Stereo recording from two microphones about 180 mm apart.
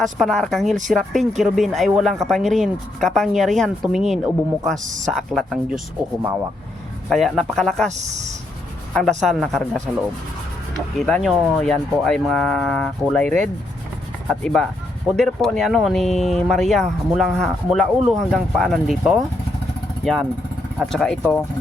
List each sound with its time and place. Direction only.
0.0 s speech: centre (ahead or behind)
7.1 s speech: centre (ahead or behind)
7.9 s speech: 40° right (ahead or behind)
8.9 s speech: centre (ahead or behind)